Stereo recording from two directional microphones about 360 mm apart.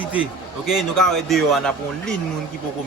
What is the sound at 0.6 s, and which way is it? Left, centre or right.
Speech, centre.